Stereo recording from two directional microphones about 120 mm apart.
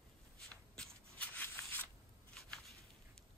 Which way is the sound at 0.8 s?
10° left (ahead or behind).